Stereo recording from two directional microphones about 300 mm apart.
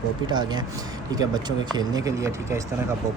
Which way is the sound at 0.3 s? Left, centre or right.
Centre.